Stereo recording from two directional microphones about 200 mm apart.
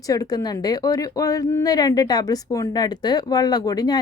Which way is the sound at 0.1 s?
20° left (ahead or behind).